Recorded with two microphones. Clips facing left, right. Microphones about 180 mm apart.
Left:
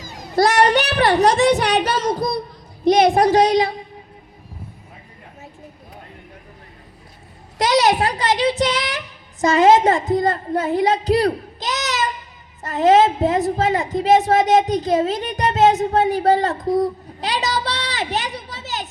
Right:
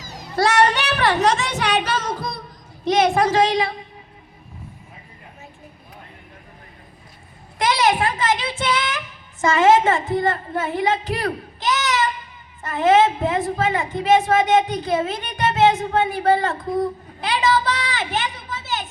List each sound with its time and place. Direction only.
0.0 s child singing: 55° left (ahead or behind)
0.3 s a woman's voice: 35° left (ahead or behind)
7.6 s a woman's voice: 40° left (ahead or behind)